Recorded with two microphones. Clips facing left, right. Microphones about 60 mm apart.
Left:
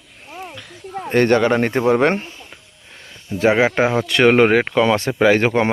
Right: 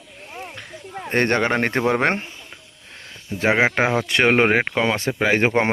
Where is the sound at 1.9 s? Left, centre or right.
Right.